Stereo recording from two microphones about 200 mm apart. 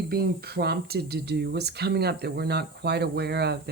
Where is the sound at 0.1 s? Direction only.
50° right (ahead or behind).